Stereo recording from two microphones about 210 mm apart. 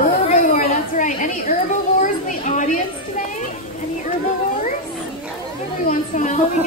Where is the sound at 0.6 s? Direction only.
35° left (ahead or behind).